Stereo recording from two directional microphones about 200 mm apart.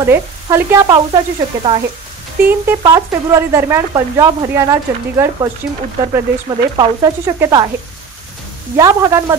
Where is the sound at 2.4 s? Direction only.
15° right (ahead or behind).